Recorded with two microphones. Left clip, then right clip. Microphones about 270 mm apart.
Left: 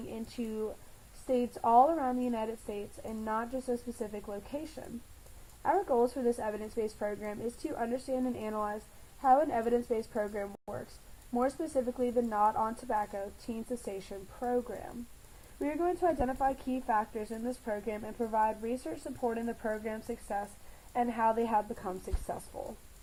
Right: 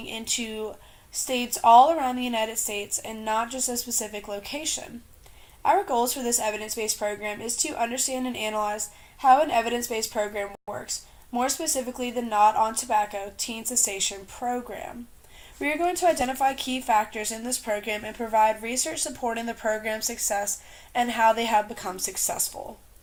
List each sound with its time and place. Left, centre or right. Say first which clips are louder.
0.1 s a woman's voice: right 11 dB; right
5.6 s a woman's voice: right 6 dB; right